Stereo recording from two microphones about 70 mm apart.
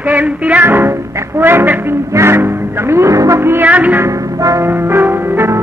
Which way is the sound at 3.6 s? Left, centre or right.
Right.